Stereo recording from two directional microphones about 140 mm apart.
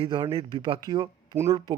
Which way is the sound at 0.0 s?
35° right (ahead or behind).